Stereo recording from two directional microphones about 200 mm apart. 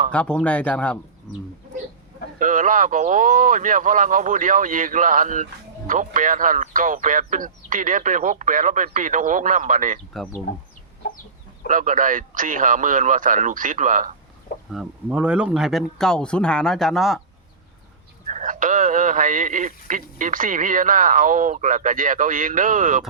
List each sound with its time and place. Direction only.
0.1 s speech: 5° left (ahead or behind)
2.4 s speech: 40° right (ahead or behind)
10.5 s speech: 50° left (ahead or behind)
11.7 s speech: 40° right (ahead or behind)
14.7 s speech: 5° right (ahead or behind)
18.3 s speech: 40° right (ahead or behind)